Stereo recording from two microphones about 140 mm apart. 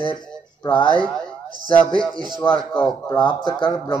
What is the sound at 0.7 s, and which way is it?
Speech, 35° left (ahead or behind).